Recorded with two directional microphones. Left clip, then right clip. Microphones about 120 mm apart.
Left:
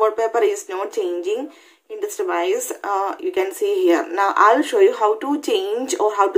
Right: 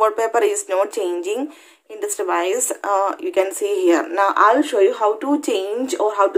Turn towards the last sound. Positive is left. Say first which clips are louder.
# even
turn(degrees=-15)  # may be behind; listen again after turning